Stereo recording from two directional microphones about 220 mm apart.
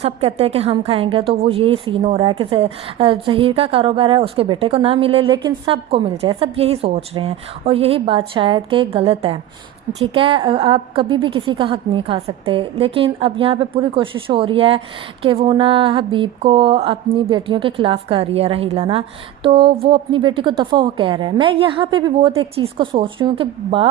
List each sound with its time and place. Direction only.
0.0 s a woman's voice: 25° right (ahead or behind)